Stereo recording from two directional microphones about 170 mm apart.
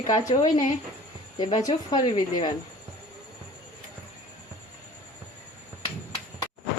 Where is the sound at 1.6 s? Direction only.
25° left (ahead or behind).